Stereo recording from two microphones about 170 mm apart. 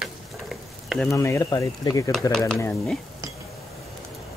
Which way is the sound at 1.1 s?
15° left (ahead or behind).